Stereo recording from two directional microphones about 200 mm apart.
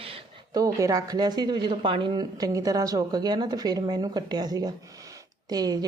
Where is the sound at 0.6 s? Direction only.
15° right (ahead or behind).